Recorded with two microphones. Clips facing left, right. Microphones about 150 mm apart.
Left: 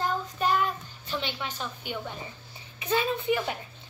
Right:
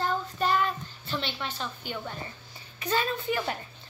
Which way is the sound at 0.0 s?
10° left (ahead or behind).